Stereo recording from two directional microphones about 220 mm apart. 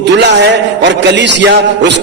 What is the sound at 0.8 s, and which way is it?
Speech, 50° right (ahead or behind).